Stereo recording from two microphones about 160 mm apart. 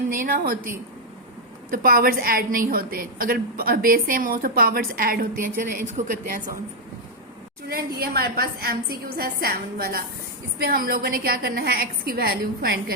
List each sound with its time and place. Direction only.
0.1 s a woman's voice: 60° right (ahead or behind)
1.7 s a woman's voice: 60° right (ahead or behind)
7.7 s a woman's voice: 75° right (ahead or behind)